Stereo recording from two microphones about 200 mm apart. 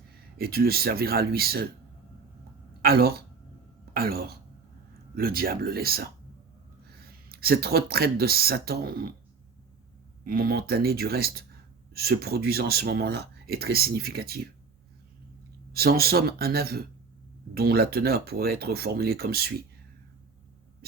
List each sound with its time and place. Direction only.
0.3 s speech: 50° right (ahead or behind)
2.8 s speech: 50° right (ahead or behind)
7.3 s speech: 50° right (ahead or behind)
10.2 s speech: 50° right (ahead or behind)
15.7 s speech: 50° right (ahead or behind)